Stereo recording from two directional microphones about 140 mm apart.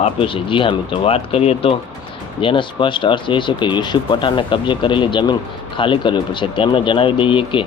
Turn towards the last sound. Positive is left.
turn(degrees=35)  # may be behind; listen again after turning